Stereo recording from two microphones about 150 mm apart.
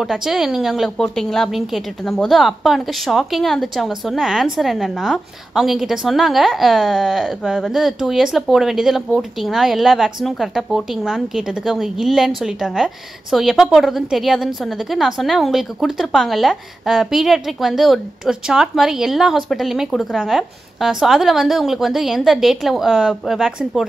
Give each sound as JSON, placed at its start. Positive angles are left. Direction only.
{"t": 0.0, "sound": "a woman's voice", "side_deg": 0}